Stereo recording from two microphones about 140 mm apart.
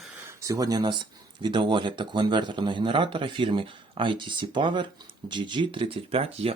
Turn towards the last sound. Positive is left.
turn(degrees=-45)  # may be behind; listen again after turning